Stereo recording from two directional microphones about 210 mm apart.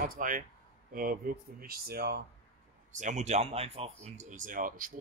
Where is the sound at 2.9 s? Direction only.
35° right (ahead or behind).